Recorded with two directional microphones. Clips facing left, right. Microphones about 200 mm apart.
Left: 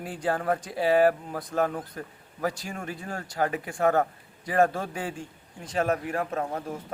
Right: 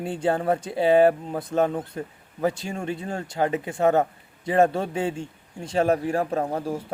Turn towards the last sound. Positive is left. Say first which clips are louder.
# right 5 dB
turn(degrees=-30)  # may be behind; listen again after turning